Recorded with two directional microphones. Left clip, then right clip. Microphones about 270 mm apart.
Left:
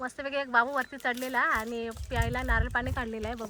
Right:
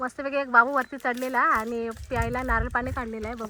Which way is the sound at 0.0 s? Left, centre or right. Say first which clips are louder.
Right 5 dB; centre.